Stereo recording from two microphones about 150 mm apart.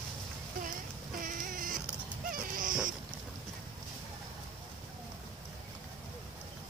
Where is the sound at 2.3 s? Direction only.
65° right (ahead or behind).